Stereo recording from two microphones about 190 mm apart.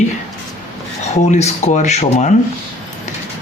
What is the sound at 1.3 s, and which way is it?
Speech, 35° left (ahead or behind).